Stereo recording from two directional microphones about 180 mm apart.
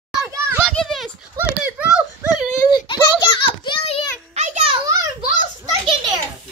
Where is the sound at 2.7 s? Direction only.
25° left (ahead or behind).